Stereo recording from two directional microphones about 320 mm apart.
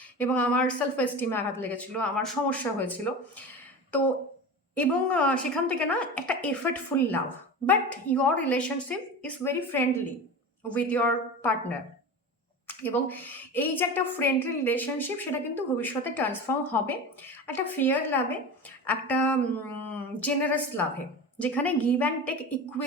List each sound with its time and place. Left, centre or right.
0.2 s a woman's voice: centre
4.7 s a woman's voice: centre
7.7 s a woman's voice: centre